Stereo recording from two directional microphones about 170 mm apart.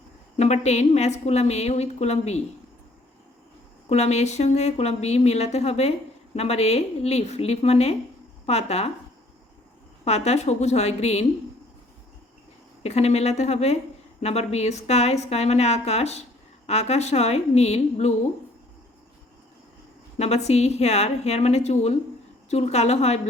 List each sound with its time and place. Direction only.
0.3 s a woman's voice: 40° left (ahead or behind)
3.8 s a woman's voice: 40° left (ahead or behind)
10.0 s a woman's voice: 40° left (ahead or behind)
12.8 s a woman's voice: 40° left (ahead or behind)
20.1 s a woman's voice: 40° left (ahead or behind)